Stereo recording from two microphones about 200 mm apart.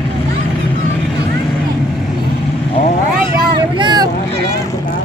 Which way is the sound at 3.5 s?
20° right (ahead or behind).